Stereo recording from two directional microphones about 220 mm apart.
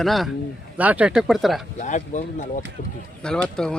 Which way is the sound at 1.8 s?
35° left (ahead or behind).